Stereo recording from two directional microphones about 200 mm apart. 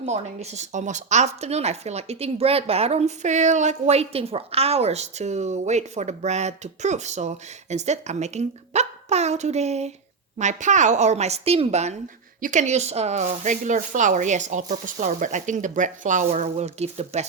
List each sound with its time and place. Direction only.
0.0 s a woman's voice: 35° right (ahead or behind)